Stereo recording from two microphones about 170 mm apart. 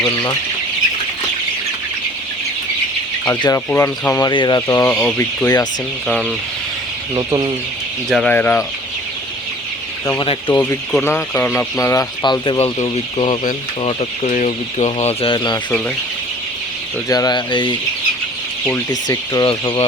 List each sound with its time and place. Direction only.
0.0 s speech: 30° left (ahead or behind)
3.2 s speech: 20° left (ahead or behind)
7.1 s speech: 25° right (ahead or behind)
8.1 s speech: 5° left (ahead or behind)
10.2 s speech: 30° left (ahead or behind)
10.5 s speech: 5° left (ahead or behind); by 15.5 s 30° left (ahead or behind)
17.1 s speech: 20° left (ahead or behind)
18.9 s speech: 20° left (ahead or behind)